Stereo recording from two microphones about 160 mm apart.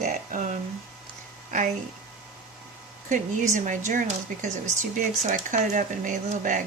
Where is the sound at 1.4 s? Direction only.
50° right (ahead or behind).